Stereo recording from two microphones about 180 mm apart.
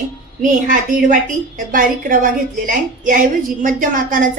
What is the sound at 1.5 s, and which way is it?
A woman's voice, 50° right (ahead or behind).